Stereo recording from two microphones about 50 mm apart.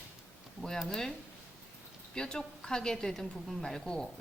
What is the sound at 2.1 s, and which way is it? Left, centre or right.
A woman's voice, centre.